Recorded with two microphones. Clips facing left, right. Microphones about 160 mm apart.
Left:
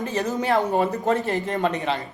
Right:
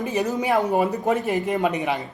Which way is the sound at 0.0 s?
15° right (ahead or behind).